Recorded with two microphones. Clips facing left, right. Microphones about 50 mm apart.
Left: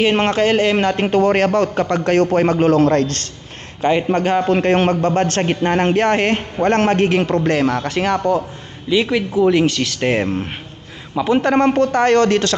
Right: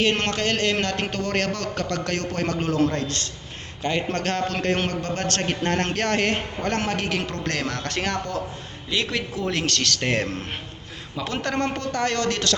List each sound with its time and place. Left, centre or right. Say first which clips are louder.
0.0 s speech: left 8 dB; centre; by 3.2 s left
3.8 s a man's voice: left 9 dB; centre
4.4 s speech: left 9 dB; left
6.6 s a man's voice: left 11 dB; left